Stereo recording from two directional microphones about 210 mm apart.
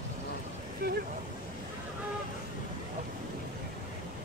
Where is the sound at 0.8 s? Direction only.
45° right (ahead or behind).